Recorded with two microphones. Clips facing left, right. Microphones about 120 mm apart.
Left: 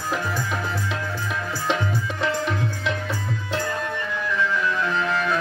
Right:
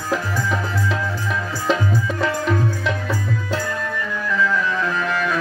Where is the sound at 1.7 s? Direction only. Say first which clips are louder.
Right 6 dB; 45° right (ahead or behind).